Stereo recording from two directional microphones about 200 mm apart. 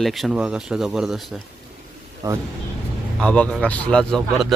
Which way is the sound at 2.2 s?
15° right (ahead or behind).